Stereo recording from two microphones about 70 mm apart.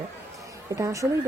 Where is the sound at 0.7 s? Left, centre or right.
Right.